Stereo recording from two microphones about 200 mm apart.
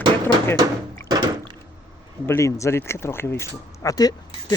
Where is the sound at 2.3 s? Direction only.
15° left (ahead or behind).